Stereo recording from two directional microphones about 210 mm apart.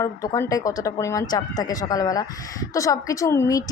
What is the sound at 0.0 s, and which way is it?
A woman's voice, 15° left (ahead or behind).